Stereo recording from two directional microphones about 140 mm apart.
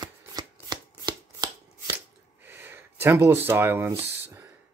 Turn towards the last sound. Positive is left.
turn(degrees=-15)  # may be behind; listen again after turning